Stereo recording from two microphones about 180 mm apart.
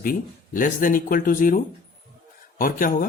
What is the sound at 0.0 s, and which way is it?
Speech, 50° left (ahead or behind).